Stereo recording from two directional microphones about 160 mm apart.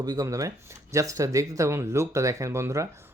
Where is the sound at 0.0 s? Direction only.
25° right (ahead or behind).